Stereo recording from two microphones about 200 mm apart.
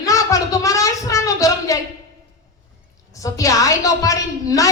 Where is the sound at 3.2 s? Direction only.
15° left (ahead or behind).